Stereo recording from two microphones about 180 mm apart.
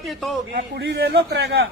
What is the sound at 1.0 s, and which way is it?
Speech, 70° right (ahead or behind).